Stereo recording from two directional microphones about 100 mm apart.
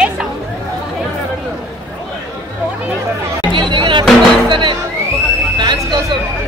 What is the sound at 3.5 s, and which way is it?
Music, 55° right (ahead or behind).